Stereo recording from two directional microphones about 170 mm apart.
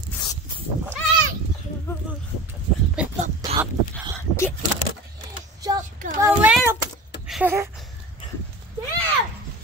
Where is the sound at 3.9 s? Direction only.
10° left (ahead or behind).